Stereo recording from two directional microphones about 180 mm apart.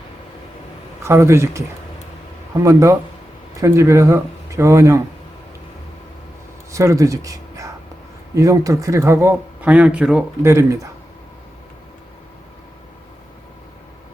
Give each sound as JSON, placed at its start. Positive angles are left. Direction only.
{"t": 1.0, "sound": "speech", "side_deg": -15}
{"t": 2.6, "sound": "speech", "side_deg": -15}
{"t": 6.7, "sound": "speech", "side_deg": -15}